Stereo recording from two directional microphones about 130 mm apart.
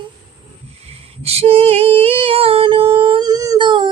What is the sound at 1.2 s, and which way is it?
Female singing, 50° right (ahead or behind).